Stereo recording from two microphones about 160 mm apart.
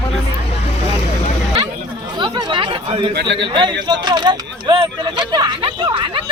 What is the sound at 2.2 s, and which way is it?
Speech, 30° right (ahead or behind).